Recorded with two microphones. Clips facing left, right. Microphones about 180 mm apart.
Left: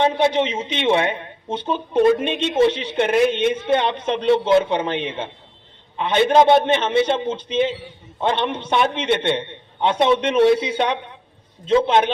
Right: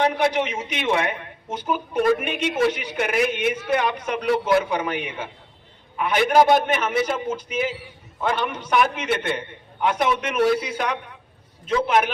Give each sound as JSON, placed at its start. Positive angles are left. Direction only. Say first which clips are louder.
{"t": 0.0, "sound": "a woman's voice", "louder": "left 3 dB", "side_deg": 25}